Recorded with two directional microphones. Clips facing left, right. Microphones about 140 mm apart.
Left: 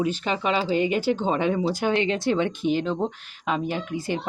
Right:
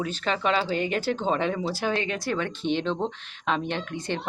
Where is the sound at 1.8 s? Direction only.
20° left (ahead or behind).